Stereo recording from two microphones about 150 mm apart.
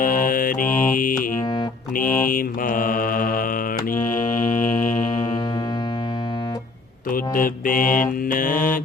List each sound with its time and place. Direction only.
0.0 s mantra: 65° left (ahead or behind)
0.8 s music: 65° left (ahead or behind)
2.2 s mantra: 65° left (ahead or behind)
4.3 s music: 60° left (ahead or behind)
7.1 s mantra: 65° left (ahead or behind)